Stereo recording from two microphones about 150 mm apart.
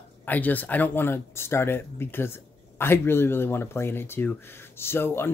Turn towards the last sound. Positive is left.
turn(degrees=15)  # may be behind; listen again after turning